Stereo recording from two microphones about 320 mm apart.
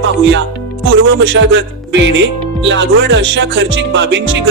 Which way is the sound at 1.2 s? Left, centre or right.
Right.